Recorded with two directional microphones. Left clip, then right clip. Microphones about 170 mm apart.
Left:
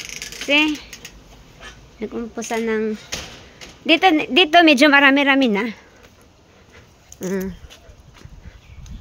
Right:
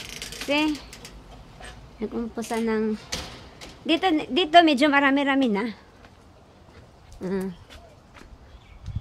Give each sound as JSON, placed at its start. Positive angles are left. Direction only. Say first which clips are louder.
{"t": 0.5, "sound": "speech", "louder": "left 7 dB", "side_deg": 10}
{"t": 2.0, "sound": "speech", "louder": "left 3 dB", "side_deg": 5}
{"t": 7.2, "sound": "speech", "louder": "left 4 dB", "side_deg": 15}